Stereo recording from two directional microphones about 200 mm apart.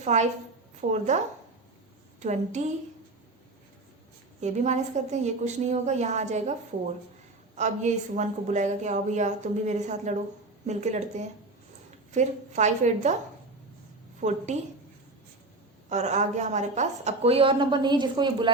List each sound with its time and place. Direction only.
0.0 s a woman's voice: 35° right (ahead or behind)
2.2 s a woman's voice: 35° right (ahead or behind)
4.4 s a woman's voice: 35° right (ahead or behind)
7.5 s a woman's voice: 35° right (ahead or behind)
14.2 s a woman's voice: 35° right (ahead or behind)
15.9 s speech: 35° right (ahead or behind)